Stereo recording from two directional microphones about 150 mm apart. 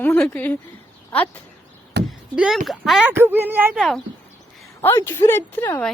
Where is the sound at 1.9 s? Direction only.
90° right.